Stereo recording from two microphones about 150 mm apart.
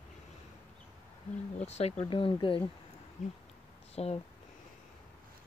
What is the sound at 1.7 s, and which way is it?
Speech, 45° left (ahead or behind).